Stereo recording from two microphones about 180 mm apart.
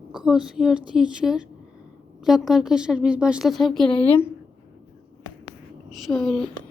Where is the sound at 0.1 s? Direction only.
5° right (ahead or behind).